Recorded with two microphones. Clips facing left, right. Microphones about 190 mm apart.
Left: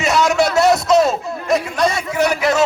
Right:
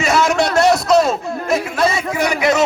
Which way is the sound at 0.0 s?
Centre (ahead or behind).